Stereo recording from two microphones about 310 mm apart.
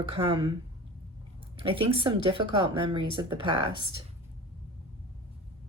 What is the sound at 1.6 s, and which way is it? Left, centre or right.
A woman's voice, centre.